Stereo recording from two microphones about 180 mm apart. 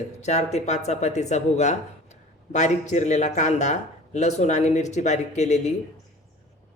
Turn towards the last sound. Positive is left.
turn(degrees=40)  # may be behind; listen again after turning